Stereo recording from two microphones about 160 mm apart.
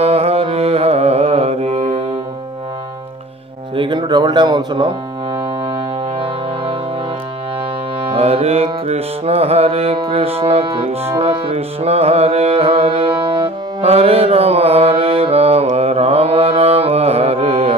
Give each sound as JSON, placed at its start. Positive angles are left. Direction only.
{"t": 0.0, "sound": "music", "side_deg": -40}
{"t": 3.7, "sound": "speech", "side_deg": -30}
{"t": 6.1, "sound": "music", "side_deg": -35}
{"t": 8.0, "sound": "music", "side_deg": -40}